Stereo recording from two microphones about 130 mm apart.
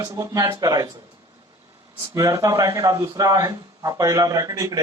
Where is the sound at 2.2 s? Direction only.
25° right (ahead or behind).